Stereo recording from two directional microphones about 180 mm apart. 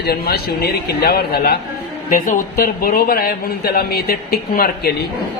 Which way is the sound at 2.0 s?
45° left (ahead or behind).